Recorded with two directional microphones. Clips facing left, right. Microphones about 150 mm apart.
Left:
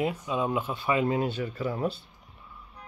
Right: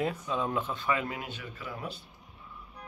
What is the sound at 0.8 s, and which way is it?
Speech, 25° left (ahead or behind).